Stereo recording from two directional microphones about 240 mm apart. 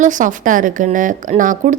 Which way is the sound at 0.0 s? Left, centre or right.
Right.